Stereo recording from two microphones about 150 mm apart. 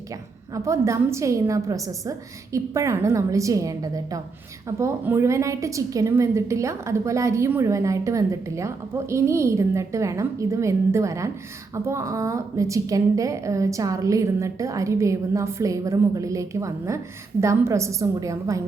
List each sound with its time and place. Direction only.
0.5 s a woman's voice: 20° right (ahead or behind)